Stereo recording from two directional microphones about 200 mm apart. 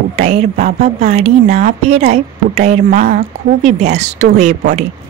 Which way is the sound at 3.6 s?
35° right (ahead or behind).